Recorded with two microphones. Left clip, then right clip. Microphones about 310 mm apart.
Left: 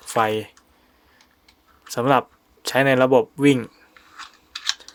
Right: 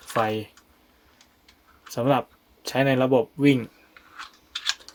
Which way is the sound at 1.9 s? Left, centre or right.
Left.